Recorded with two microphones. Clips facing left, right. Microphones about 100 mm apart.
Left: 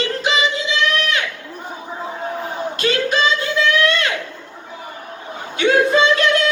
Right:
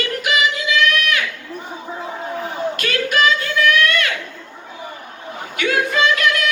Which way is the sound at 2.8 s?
25° left (ahead or behind).